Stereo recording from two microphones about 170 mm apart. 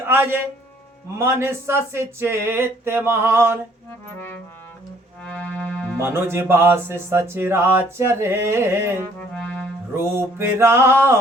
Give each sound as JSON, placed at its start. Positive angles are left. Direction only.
{"t": 0.1, "sound": "music", "side_deg": -15}
{"t": 5.2, "sound": "music", "side_deg": 10}
{"t": 6.0, "sound": "music", "side_deg": -15}
{"t": 9.1, "sound": "music", "side_deg": 5}
{"t": 9.9, "sound": "music", "side_deg": -15}